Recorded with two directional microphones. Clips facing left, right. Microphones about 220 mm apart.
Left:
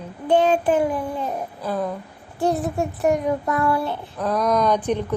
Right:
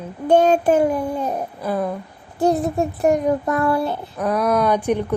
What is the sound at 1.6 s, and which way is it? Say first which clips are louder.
Speech: right 2 dB; 10° right (ahead or behind).